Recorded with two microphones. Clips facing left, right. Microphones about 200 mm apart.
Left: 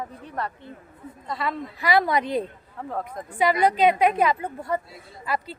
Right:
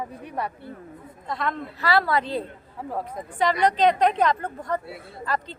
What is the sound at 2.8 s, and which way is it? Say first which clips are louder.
Speech: even; 5° right (ahead or behind).